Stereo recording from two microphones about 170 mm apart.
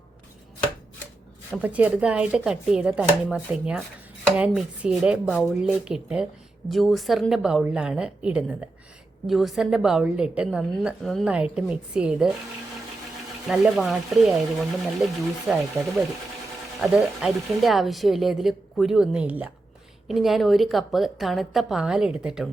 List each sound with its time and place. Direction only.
1.6 s speech: 10° right (ahead or behind)
13.5 s speech: centre (ahead or behind)
15.8 s speech: 15° right (ahead or behind)
16.8 s speech: centre (ahead or behind)